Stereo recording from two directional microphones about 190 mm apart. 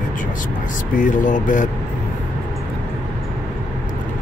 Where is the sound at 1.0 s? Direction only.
40° left (ahead or behind).